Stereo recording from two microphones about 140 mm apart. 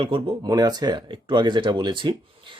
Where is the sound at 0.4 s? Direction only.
30° right (ahead or behind).